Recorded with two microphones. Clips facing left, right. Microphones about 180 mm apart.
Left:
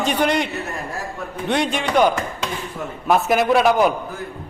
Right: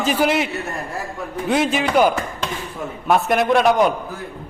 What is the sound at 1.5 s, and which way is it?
A man's voice, 5° right (ahead or behind).